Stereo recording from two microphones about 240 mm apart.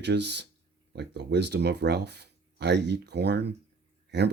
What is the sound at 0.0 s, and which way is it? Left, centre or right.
Speech, right.